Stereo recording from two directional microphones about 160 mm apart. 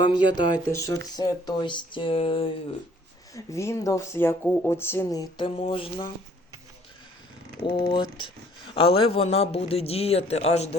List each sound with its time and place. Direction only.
0.0 s speech: 30° left (ahead or behind)
3.3 s speech: 20° left (ahead or behind)
5.4 s speech: 35° left (ahead or behind)
7.6 s speech: 30° left (ahead or behind)